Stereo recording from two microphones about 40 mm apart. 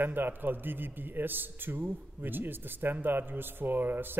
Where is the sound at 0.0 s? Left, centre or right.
Right.